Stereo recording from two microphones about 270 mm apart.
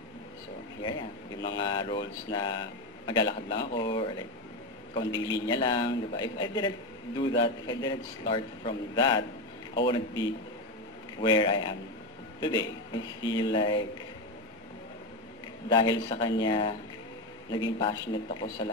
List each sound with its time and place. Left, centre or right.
0.8 s a man's voice: centre
15.7 s a man's voice: centre